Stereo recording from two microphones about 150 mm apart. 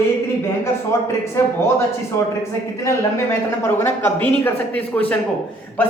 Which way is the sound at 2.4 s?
20° left (ahead or behind).